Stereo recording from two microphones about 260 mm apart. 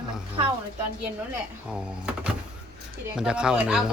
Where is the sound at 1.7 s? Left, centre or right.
Centre.